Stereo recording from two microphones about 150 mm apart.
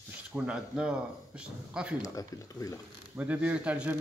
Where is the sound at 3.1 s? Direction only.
10° right (ahead or behind).